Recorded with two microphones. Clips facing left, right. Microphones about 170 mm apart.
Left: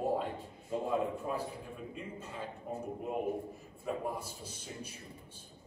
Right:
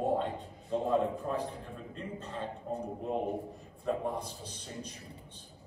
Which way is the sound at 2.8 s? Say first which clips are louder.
Right 2 dB; 35° right (ahead or behind).